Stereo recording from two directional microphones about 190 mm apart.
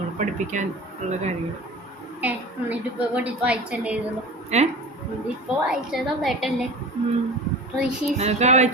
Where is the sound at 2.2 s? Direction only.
10° right (ahead or behind).